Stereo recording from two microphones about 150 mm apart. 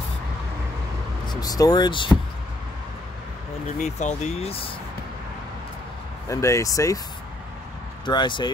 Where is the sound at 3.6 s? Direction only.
50° left (ahead or behind).